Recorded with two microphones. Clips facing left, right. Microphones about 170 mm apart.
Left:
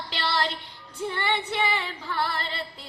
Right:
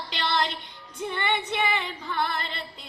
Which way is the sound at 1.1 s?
20° right (ahead or behind).